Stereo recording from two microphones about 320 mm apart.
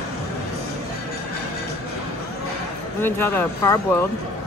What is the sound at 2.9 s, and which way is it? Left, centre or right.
Speech, centre.